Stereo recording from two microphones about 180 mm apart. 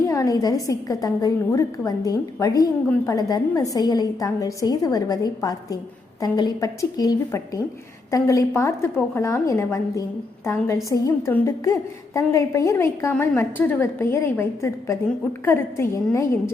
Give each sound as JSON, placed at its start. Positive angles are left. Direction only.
{"t": 0.0, "sound": "a woman's voice", "side_deg": 20}